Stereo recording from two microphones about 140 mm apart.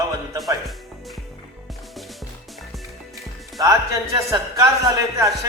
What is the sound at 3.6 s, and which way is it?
A man's voice, 25° right (ahead or behind).